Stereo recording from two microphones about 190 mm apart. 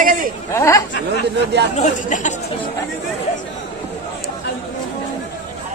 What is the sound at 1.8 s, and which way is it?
Speech, 40° left (ahead or behind).